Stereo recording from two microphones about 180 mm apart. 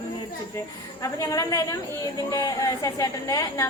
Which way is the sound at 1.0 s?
20° left (ahead or behind).